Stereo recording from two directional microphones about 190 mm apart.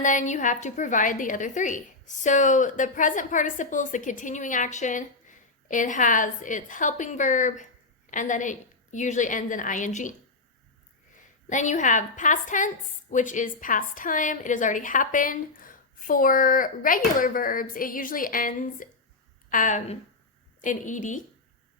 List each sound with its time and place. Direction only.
0.0 s a woman's voice: 40° left (ahead or behind)
11.2 s a woman's voice: 40° left (ahead or behind)